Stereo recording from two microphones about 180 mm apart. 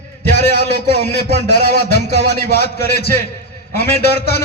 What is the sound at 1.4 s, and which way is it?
A man's voice, 60° left (ahead or behind).